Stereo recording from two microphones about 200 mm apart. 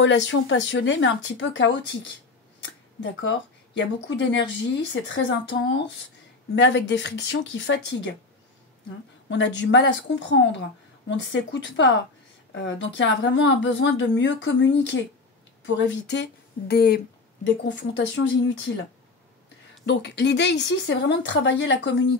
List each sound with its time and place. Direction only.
0.0 s speech: 65° left (ahead or behind)
9.3 s speech: 65° left (ahead or behind)
19.9 s speech: 60° left (ahead or behind)